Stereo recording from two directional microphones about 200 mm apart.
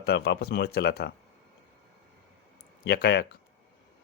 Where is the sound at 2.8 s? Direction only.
55° left (ahead or behind).